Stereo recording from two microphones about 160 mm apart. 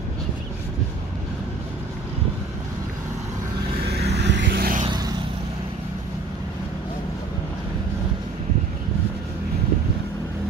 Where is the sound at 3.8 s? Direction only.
90° right.